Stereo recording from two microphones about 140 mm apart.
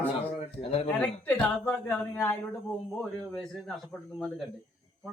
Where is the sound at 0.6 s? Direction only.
45° left (ahead or behind).